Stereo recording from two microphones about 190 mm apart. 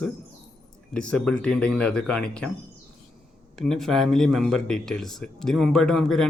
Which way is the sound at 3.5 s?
Centre (ahead or behind).